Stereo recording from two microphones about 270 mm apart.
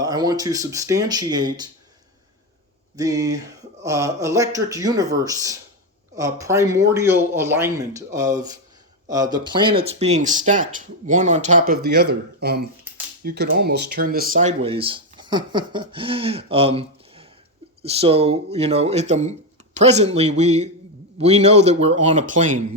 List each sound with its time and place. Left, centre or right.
0.0 s speech: centre
2.9 s speech: centre